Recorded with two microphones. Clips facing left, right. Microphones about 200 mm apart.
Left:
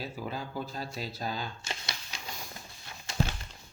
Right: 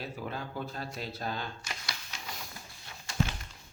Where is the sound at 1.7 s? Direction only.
25° left (ahead or behind).